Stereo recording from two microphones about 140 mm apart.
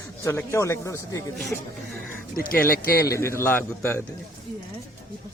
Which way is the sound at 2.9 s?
20° left (ahead or behind).